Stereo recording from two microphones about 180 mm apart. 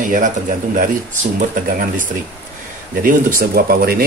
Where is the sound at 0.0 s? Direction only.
50° right (ahead or behind).